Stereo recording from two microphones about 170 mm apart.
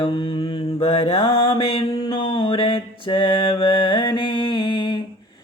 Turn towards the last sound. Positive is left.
turn(degrees=30)  # may be behind; listen again after turning